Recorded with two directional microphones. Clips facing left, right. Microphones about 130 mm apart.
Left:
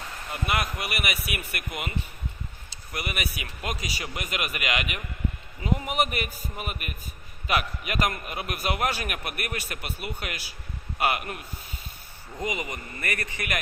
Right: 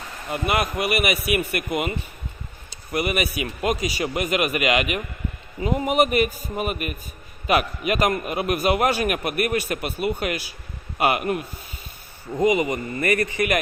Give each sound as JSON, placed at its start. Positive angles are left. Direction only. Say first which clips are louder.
{"t": 0.3, "sound": "speech", "louder": "right 6 dB", "side_deg": -20}
{"t": 2.9, "sound": "a man's voice", "louder": "right 10 dB", "side_deg": -15}
{"t": 12.4, "sound": "a man's voice", "louder": "right 12 dB", "side_deg": -20}